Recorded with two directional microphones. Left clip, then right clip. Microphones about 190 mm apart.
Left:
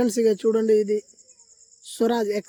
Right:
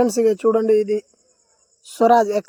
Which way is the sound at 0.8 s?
30° right (ahead or behind).